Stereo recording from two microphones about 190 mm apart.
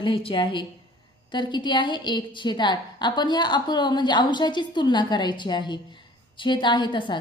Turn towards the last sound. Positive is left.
turn(degrees=25)  # may be behind; listen again after turning